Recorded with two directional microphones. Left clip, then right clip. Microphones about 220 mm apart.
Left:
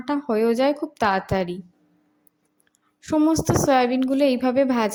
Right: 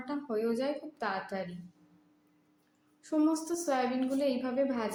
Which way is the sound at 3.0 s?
35° left (ahead or behind).